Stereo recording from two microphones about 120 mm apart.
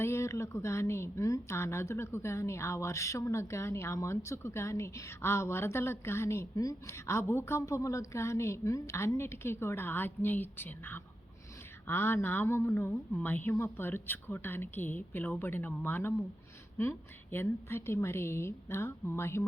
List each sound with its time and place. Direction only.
0.0 s speech: 25° left (ahead or behind)